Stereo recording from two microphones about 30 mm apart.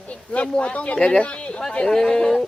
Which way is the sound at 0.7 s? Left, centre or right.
Left.